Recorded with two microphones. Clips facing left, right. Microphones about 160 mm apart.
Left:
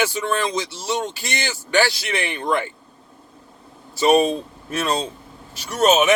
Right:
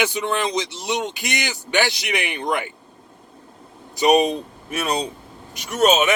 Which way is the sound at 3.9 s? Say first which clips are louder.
Even; 15° right (ahead or behind).